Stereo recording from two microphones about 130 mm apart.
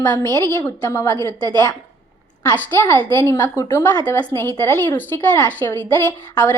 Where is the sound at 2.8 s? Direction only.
20° left (ahead or behind).